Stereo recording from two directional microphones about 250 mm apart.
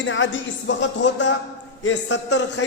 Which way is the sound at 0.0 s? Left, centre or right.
Left.